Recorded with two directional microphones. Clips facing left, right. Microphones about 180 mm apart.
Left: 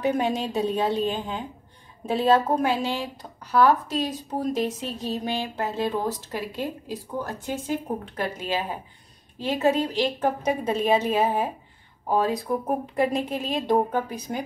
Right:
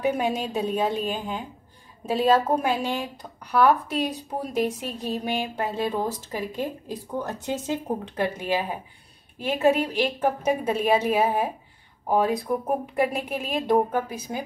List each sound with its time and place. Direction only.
0.0 s speech: 10° right (ahead or behind)